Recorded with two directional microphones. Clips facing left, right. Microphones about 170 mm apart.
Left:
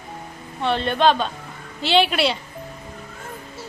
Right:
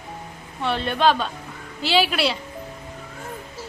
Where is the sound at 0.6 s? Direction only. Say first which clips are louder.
Left 2 dB; 5° right (ahead or behind).